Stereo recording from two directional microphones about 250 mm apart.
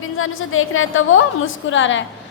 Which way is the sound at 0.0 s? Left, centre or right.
Left.